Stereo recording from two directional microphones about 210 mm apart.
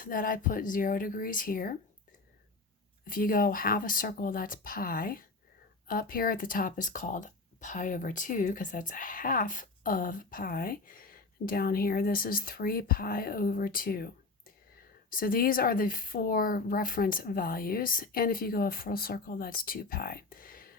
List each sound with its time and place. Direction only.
0.0 s speech: 40° left (ahead or behind)
3.1 s speech: 40° left (ahead or behind)